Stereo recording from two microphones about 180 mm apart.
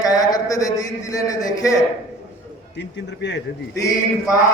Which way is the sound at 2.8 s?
80° left.